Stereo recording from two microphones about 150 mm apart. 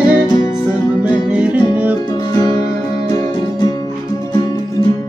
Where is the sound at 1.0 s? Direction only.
10° right (ahead or behind).